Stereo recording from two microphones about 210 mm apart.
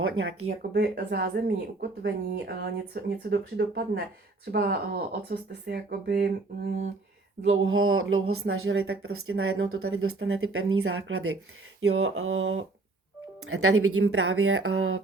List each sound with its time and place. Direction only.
0.0 s speech: 70° right (ahead or behind)
0.7 s speech: 50° right (ahead or behind)
7.6 s speech: 75° right (ahead or behind)
13.5 s speech: 90° right